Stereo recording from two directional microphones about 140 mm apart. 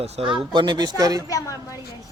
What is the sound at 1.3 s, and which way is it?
Speech, 25° left (ahead or behind).